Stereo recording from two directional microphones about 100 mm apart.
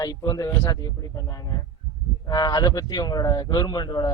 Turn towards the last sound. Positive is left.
turn(degrees=45)  # may be behind; listen again after turning